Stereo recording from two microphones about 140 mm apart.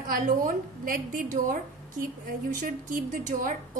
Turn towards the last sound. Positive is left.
turn(degrees=-70)  # may be behind; listen again after turning